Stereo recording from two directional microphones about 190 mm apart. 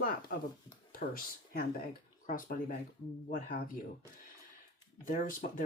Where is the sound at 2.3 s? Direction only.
45° left (ahead or behind).